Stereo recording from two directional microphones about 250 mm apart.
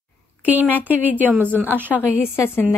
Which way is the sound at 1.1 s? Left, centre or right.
Centre.